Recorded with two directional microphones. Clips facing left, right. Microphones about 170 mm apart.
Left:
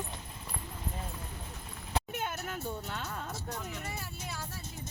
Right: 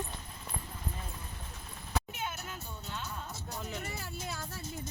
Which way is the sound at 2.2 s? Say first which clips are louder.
Left 3 dB; 60° left (ahead or behind).